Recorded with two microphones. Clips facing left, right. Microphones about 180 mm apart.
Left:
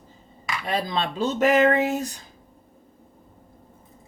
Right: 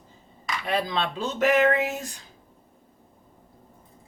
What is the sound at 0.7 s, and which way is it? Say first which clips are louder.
Speech: even; 40° left (ahead or behind).